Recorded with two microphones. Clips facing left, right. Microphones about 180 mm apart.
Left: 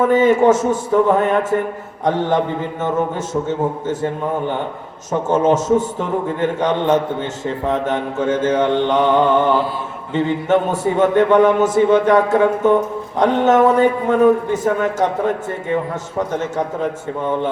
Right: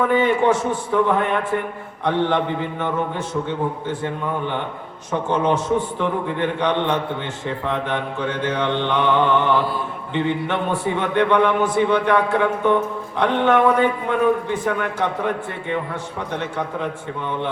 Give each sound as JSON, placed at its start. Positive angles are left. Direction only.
{"t": 0.0, "sound": "a man's voice", "side_deg": 45}